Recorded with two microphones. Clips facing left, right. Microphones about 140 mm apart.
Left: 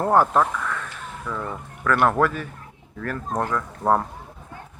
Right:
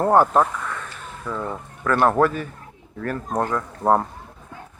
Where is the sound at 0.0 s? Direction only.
15° right (ahead or behind).